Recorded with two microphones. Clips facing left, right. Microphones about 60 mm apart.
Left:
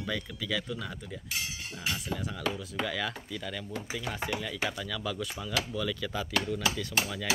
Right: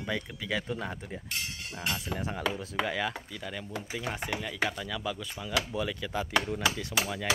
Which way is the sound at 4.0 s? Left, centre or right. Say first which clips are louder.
Even; right.